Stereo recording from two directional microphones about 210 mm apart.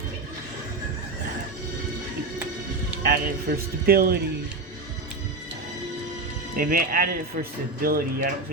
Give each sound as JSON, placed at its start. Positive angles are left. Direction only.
{"t": 3.0, "sound": "speech", "side_deg": -45}
{"t": 6.6, "sound": "speech", "side_deg": -45}